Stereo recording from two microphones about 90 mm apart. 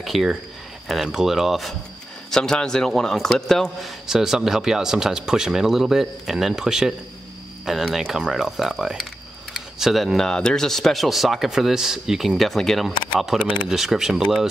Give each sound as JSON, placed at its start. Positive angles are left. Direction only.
{"t": 0.0, "sound": "speech", "side_deg": 0}
{"t": 4.1, "sound": "speech", "side_deg": -5}